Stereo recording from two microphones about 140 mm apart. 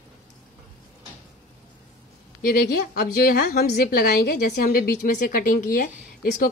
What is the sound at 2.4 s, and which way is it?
A woman's voice, 90° left.